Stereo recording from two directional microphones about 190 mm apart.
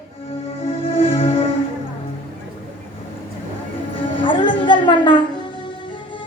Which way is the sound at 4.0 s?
25° left (ahead or behind).